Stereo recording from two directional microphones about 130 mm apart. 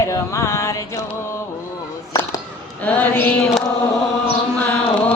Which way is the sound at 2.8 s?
10° left (ahead or behind).